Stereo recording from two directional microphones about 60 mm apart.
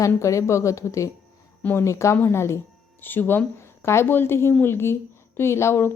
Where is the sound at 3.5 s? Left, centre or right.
Left.